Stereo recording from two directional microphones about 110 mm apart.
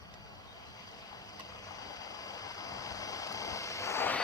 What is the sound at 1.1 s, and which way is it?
Vehicle, 35° left (ahead or behind).